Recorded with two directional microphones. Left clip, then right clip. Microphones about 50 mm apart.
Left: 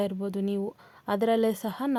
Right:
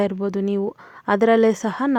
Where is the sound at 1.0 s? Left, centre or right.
Right.